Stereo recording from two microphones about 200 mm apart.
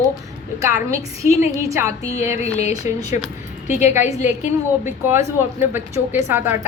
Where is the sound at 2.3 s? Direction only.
35° left (ahead or behind).